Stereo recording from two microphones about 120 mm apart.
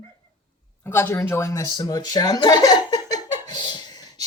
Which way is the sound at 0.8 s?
20° left (ahead or behind).